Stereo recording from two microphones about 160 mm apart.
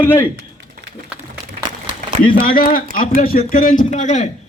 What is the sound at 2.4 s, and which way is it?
A man's voice, 60° left (ahead or behind).